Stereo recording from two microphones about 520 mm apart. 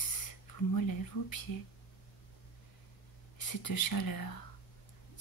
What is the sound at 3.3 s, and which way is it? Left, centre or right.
Speech, left.